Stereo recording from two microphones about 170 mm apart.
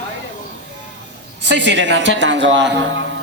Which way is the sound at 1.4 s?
90° right.